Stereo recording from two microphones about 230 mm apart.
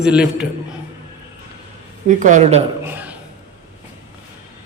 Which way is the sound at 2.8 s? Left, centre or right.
Centre.